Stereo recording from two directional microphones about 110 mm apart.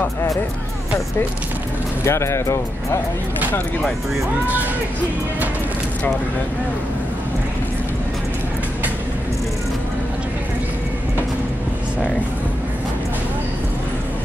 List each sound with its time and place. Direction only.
2.0 s speech: 25° left (ahead or behind)